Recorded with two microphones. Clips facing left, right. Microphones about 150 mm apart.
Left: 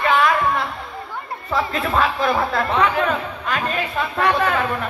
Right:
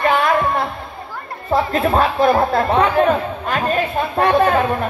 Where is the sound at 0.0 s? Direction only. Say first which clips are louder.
Right 2 dB; 30° right (ahead or behind).